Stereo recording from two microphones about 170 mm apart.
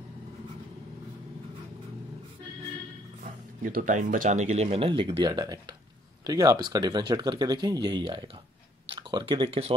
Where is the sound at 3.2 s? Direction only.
55° right (ahead or behind).